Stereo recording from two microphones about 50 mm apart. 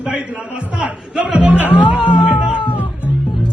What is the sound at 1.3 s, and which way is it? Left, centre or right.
Speech, right.